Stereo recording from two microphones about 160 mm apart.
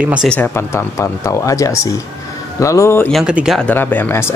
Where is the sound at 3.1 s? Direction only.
5° right (ahead or behind).